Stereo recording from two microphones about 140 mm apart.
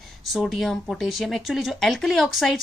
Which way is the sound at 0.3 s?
Centre (ahead or behind).